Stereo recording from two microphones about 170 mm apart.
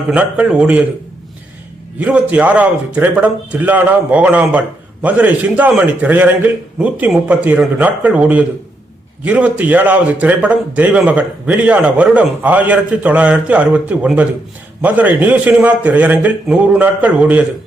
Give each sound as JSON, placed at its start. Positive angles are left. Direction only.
{"t": 0.1, "sound": "a man's voice", "side_deg": -10}
{"t": 2.0, "sound": "a man's voice", "side_deg": -5}